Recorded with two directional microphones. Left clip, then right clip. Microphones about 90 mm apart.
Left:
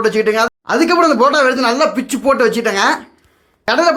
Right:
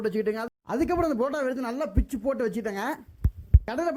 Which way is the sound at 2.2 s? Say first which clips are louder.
Left 16 dB; 50° right (ahead or behind).